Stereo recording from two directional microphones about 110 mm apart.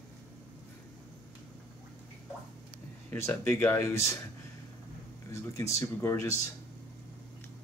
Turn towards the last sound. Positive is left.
turn(degrees=25)  # may be behind; listen again after turning